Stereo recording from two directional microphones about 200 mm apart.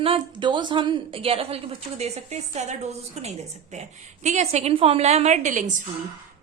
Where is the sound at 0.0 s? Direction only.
25° right (ahead or behind).